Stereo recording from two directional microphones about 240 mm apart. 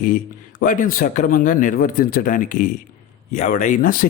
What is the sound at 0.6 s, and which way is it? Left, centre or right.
Speech, left.